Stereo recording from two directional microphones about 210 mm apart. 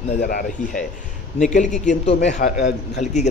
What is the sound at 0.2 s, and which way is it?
A man's voice, 45° left (ahead or behind).